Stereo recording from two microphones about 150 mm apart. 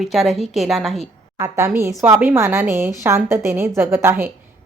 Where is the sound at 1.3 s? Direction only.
20° right (ahead or behind).